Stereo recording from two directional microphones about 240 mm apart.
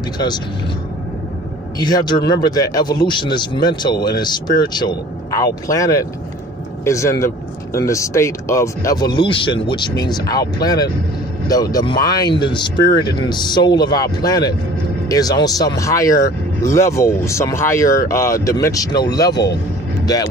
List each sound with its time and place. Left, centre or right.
1.8 s a man's voice: centre